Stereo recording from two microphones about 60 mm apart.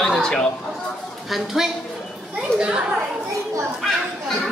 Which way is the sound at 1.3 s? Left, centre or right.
Centre.